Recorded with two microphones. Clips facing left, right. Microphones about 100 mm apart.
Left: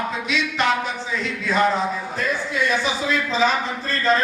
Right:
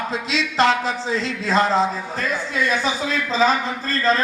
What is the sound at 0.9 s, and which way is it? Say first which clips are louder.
Speech: right 3 dB; 30° right (ahead or behind).